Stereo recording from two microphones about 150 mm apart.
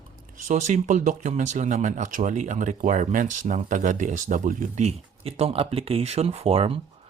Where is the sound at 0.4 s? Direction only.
55° right (ahead or behind).